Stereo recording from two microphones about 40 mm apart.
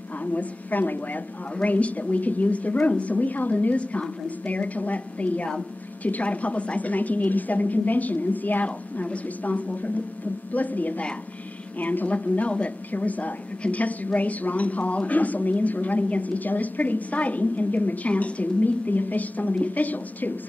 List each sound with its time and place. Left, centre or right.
0.2 s a woman's voice: left
8.6 s a woman's voice: left
12.1 s a woman's voice: left